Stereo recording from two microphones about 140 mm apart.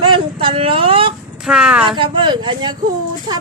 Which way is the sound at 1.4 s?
5° right (ahead or behind).